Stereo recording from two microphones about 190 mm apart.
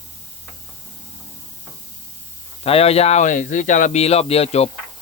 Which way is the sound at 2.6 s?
30° left (ahead or behind).